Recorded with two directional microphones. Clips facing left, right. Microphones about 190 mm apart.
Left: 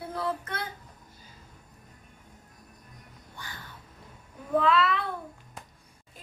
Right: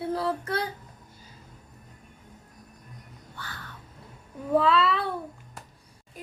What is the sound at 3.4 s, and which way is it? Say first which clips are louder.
Crow: right 2 dB; 15° left (ahead or behind).